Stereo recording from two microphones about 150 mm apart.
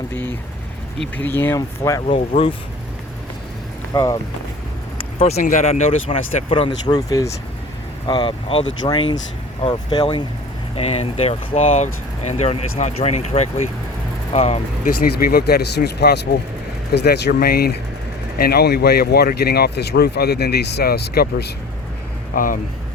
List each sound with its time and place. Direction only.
0.1 s vehicle: 15° left (ahead or behind)
1.1 s speech: 15° left (ahead or behind)
2.1 s speech: 40° left (ahead or behind)
3.9 s speech: 25° left (ahead or behind)
5.2 s speech: 50° left (ahead or behind); by 10.2 s 30° left (ahead or behind)
10.8 s speech: 40° left (ahead or behind)
15.0 s speech: 90° left
22.4 s speech: 65° left (ahead or behind)